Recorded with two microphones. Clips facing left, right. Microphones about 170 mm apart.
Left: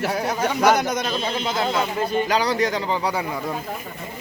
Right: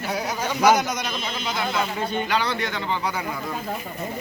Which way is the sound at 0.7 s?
55° left (ahead or behind).